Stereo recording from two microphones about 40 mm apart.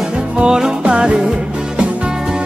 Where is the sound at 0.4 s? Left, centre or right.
Right.